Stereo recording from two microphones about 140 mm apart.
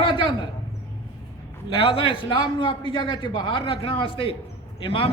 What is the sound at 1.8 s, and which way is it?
A man's voice, 40° left (ahead or behind).